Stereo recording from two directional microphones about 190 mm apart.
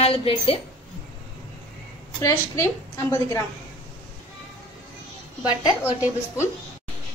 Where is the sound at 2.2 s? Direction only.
15° left (ahead or behind).